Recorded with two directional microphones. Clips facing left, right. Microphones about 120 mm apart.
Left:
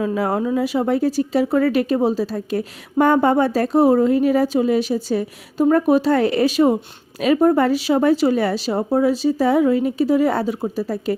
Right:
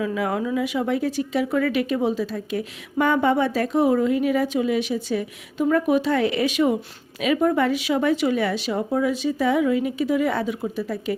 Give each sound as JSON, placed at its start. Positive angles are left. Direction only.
{"t": 0.0, "sound": "speech", "side_deg": 35}